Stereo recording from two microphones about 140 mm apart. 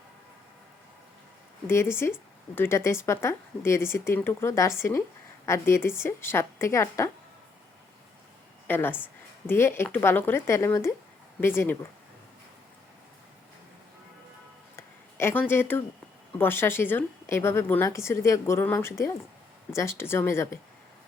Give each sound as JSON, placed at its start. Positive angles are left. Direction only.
{"t": 1.6, "sound": "a woman's voice", "side_deg": 15}
{"t": 8.6, "sound": "a woman's voice", "side_deg": 15}
{"t": 14.8, "sound": "a sound", "side_deg": 15}
{"t": 16.4, "sound": "a woman's voice", "side_deg": 15}